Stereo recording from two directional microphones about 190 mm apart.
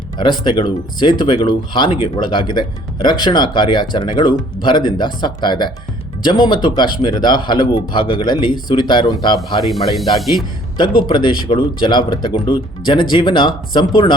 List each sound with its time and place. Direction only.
0.2 s speech: 25° left (ahead or behind)
9.6 s speech: centre (ahead or behind)
10.8 s speech: 25° left (ahead or behind)